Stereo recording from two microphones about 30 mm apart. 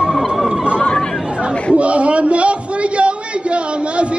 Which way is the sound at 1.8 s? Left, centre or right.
Right.